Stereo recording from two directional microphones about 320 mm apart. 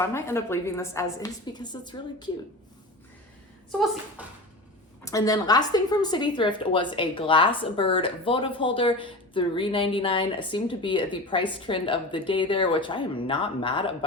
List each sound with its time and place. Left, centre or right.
0.0 s a woman's voice: centre
4.2 s a sound: centre
5.0 s a woman's voice: centre